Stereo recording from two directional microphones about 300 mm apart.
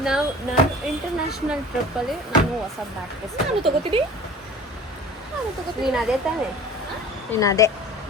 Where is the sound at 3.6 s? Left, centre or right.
Centre.